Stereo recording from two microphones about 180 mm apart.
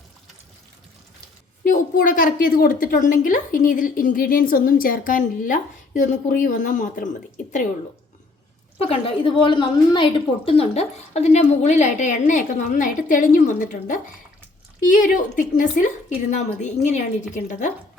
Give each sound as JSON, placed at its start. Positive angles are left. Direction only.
{"t": 1.6, "sound": "a woman's voice", "side_deg": 45}
{"t": 8.8, "sound": "a woman's voice", "side_deg": 30}